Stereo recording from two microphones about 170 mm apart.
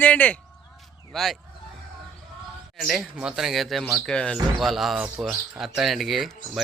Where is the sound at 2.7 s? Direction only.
Centre (ahead or behind).